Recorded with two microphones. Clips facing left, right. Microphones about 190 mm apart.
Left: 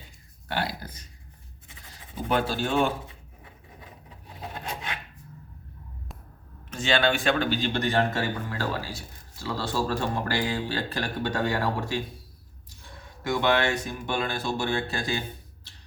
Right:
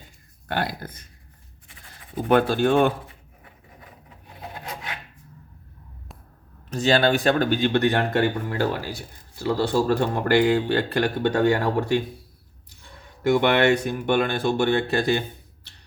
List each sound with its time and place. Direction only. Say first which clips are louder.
0.4 s speech: right 3 dB; 50° right (ahead or behind)
2.3 s speech: right 7 dB; 55° right (ahead or behind)
4.6 s filing: even; 25° left (ahead or behind)
6.7 s speech: right 5 dB; 40° right (ahead or behind); by 12.0 s 60° right (ahead or behind)
13.2 s speech: right 6 dB; 65° right (ahead or behind)